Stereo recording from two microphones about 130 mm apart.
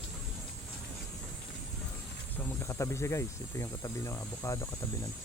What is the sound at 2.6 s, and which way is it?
Speech, 20° left (ahead or behind).